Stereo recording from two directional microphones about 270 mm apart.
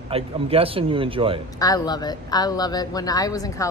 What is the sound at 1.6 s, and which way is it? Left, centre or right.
A woman's voice, centre.